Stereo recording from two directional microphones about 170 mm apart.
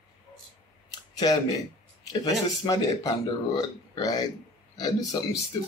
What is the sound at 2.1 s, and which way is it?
A man's voice, 20° left (ahead or behind).